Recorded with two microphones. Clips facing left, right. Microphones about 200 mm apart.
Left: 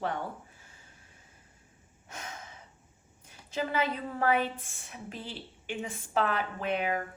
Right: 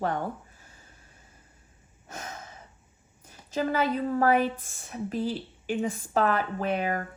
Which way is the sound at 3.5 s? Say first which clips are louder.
Right 5 dB; 40° right (ahead or behind).